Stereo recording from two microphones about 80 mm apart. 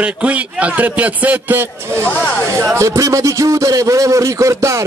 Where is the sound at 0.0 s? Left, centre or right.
Centre.